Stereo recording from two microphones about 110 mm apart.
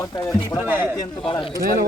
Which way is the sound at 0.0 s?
30° left (ahead or behind).